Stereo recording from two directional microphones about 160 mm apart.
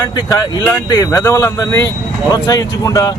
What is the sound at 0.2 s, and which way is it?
Speech, 25° left (ahead or behind).